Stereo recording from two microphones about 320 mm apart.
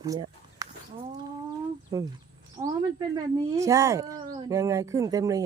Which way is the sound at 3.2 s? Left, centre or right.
Centre.